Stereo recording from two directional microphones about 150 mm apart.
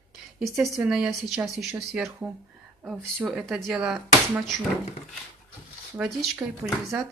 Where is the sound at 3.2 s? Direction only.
Centre (ahead or behind).